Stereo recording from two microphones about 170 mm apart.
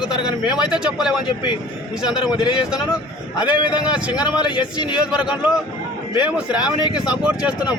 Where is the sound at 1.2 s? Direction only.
30° left (ahead or behind).